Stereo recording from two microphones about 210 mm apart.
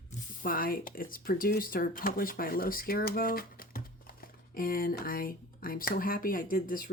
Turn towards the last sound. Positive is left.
turn(degrees=40)  # may be behind; listen again after turning